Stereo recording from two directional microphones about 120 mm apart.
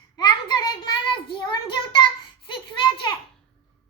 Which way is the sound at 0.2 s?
35° left (ahead or behind).